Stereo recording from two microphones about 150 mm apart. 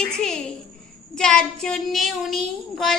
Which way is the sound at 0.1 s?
5° left (ahead or behind).